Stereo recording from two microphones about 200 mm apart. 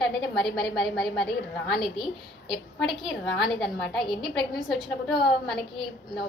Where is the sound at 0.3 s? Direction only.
Centre (ahead or behind).